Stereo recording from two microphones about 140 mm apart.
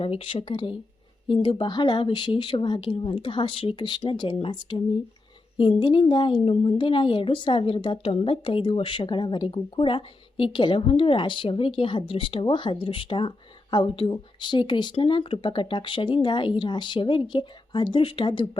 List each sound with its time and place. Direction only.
0.0 s speech: 40° left (ahead or behind)
5.8 s speech: 35° left (ahead or behind)